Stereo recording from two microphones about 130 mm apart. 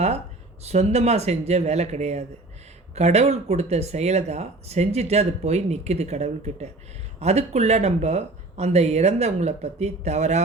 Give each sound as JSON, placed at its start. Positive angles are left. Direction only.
{"t": 0.6, "sound": "speech", "side_deg": -55}